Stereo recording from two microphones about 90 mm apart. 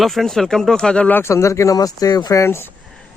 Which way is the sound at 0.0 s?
Centre (ahead or behind).